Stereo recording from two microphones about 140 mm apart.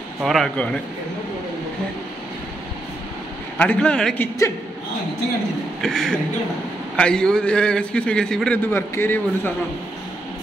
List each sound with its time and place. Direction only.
0.2 s speech: centre (ahead or behind)
3.5 s a man's voice: 10° left (ahead or behind)
5.8 s a man's voice: 5° left (ahead or behind)
8.6 s a man's voice: 15° left (ahead or behind)